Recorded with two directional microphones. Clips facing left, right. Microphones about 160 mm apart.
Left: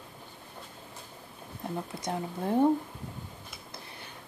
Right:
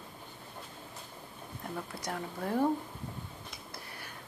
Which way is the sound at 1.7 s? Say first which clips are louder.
Left 4 dB; 25° left (ahead or behind).